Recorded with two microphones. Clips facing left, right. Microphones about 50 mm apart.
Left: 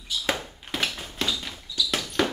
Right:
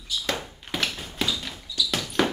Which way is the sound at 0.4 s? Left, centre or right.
Centre.